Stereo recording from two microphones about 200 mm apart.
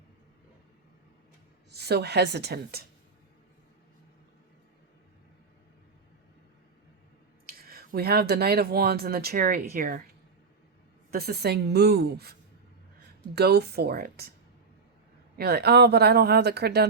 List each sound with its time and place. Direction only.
1.7 s a woman's voice: 55° right (ahead or behind)
7.4 s speech: 50° right (ahead or behind)
11.1 s speech: 50° right (ahead or behind)
15.4 s speech: 55° right (ahead or behind)